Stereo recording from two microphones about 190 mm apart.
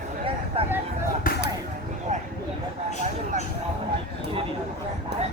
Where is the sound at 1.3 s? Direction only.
45° left (ahead or behind).